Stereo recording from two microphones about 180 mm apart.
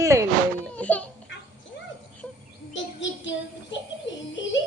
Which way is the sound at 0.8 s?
10° left (ahead or behind).